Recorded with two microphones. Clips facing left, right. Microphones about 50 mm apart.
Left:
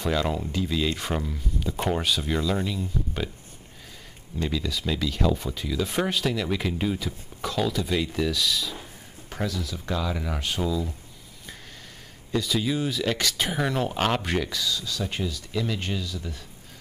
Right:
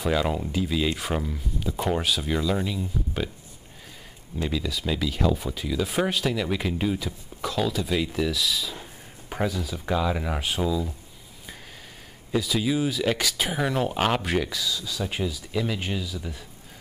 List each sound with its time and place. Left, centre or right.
0.0 s speech: centre
4.4 s speech: centre
9.3 s speech: centre
12.3 s speech: centre